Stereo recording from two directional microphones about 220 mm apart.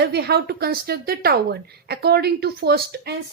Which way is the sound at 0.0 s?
45° right (ahead or behind).